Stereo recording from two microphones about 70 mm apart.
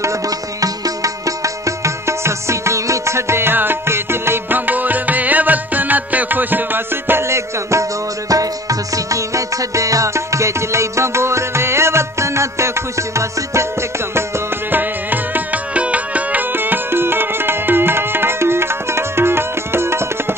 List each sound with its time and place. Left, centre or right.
0.0 s music: right
8.3 s music: right
14.7 s music: right